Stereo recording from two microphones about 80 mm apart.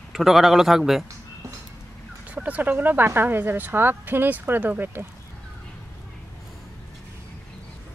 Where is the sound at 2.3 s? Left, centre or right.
Centre.